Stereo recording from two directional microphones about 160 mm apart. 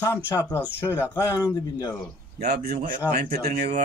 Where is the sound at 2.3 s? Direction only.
75° right (ahead or behind).